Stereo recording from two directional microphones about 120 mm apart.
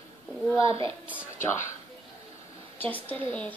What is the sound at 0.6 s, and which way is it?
Speech, 50° right (ahead or behind).